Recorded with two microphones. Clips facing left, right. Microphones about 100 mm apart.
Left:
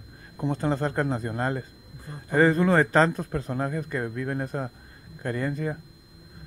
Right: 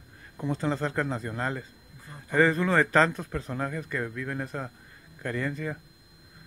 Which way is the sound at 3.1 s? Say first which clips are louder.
Left 4 dB; 40° left (ahead or behind).